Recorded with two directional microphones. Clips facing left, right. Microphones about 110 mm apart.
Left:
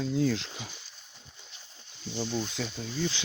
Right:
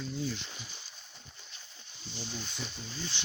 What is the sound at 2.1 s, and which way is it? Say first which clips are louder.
Speech: left 10 dB; 90° left.